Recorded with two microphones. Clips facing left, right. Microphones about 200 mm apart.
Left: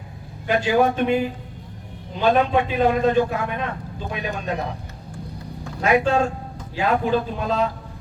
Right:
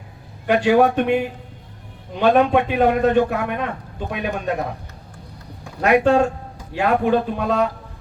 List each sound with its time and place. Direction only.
0.4 s a man's voice: 65° right (ahead or behind)
2.2 s a man's voice: 65° right (ahead or behind)
5.8 s a man's voice: 65° right (ahead or behind)